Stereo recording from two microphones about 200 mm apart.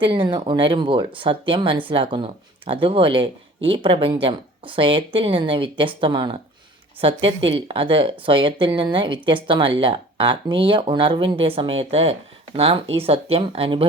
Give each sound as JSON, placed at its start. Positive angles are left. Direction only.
{"t": 0.0, "sound": "speech", "side_deg": -25}